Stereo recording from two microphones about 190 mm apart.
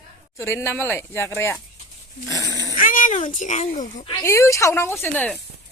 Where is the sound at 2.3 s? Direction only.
15° left (ahead or behind).